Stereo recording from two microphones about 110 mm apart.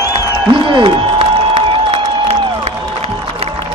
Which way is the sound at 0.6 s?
55° right (ahead or behind).